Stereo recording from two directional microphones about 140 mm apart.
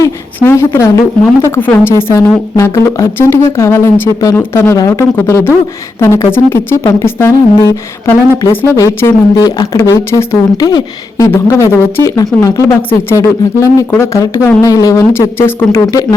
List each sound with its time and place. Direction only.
0.3 s speech: 15° left (ahead or behind)
10.7 s speech: 30° left (ahead or behind)
11.3 s speech: 20° left (ahead or behind)